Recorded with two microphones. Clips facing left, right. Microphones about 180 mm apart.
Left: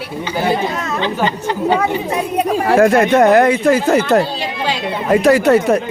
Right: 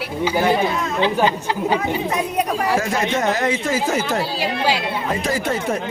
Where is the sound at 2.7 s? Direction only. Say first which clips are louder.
Left 9 dB; 60° left (ahead or behind).